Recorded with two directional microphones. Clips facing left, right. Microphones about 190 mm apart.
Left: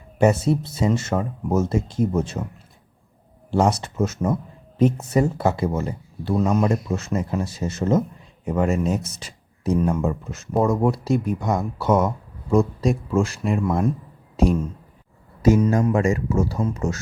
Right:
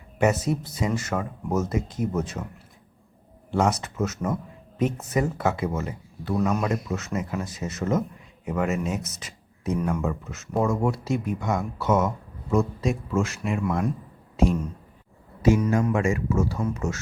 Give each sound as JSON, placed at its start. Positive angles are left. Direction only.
{"t": 0.2, "sound": "speech", "side_deg": 30}
{"t": 3.5, "sound": "speech", "side_deg": 30}
{"t": 15.4, "sound": "speech", "side_deg": 40}
{"t": 15.6, "sound": "speech", "side_deg": 30}